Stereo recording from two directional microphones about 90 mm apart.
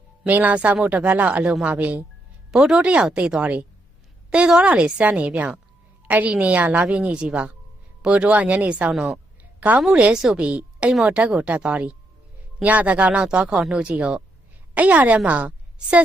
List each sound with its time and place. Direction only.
0.3 s a woman's voice: 20° right (ahead or behind)